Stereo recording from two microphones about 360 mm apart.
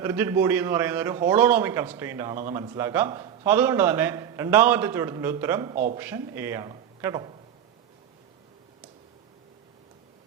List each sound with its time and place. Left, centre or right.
0.0 s a man's voice: centre
5.7 s a man's voice: right
6.0 s a man's voice: centre